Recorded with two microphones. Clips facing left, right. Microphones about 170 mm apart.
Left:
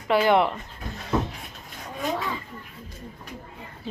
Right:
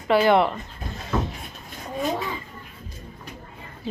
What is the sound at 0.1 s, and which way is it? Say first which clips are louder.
Speech: right 2 dB; 15° left (ahead or behind).